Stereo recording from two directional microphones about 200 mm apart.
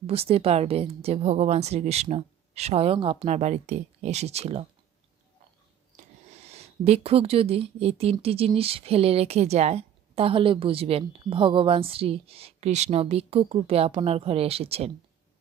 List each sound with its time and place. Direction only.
0.0 s a woman's voice: 30° right (ahead or behind)
5.9 s speech: 30° right (ahead or behind)